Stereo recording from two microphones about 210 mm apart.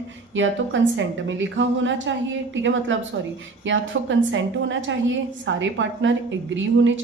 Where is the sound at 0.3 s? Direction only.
65° right (ahead or behind).